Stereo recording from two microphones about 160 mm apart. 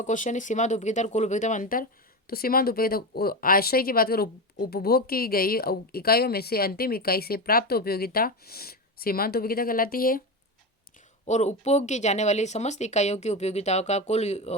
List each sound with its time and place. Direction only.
0.0 s speech: 50° left (ahead or behind)
11.3 s speech: 45° left (ahead or behind)